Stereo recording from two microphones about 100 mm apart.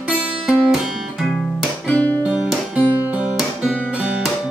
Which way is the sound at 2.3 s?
10° right (ahead or behind).